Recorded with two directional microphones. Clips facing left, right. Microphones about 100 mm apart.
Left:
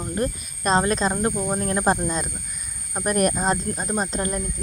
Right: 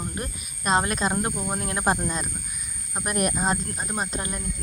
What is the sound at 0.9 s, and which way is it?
Speech, 10° right (ahead or behind).